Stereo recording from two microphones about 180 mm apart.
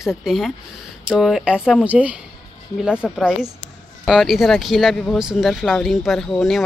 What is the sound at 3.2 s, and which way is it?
Speech, 5° right (ahead or behind).